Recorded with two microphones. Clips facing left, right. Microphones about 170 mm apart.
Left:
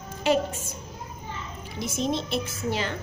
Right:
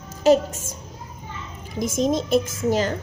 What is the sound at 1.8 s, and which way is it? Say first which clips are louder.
A woman's voice: right 6 dB; 45° right (ahead or behind).